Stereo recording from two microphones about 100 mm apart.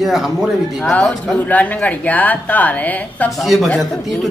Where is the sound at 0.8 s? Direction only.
10° left (ahead or behind).